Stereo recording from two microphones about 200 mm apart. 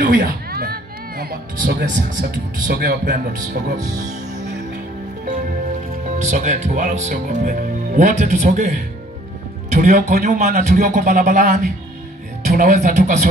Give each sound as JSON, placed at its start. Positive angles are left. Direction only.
{"t": 0.0, "sound": "speech", "side_deg": -50}
{"t": 6.1, "sound": "a man's voice", "side_deg": -35}